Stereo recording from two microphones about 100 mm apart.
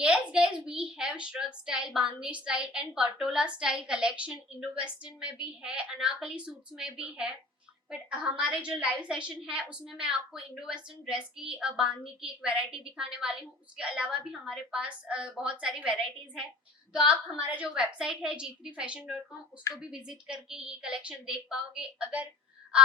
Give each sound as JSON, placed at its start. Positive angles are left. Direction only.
{"t": 0.0, "sound": "a woman's voice", "side_deg": -10}